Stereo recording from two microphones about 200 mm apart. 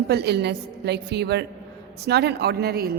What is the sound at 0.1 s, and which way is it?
A woman's voice, 55° right (ahead or behind).